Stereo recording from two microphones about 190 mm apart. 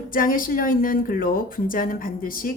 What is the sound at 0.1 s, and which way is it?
A woman's voice, 45° left (ahead or behind).